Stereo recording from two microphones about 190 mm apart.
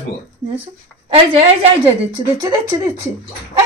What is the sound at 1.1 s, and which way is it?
Speech, 30° right (ahead or behind).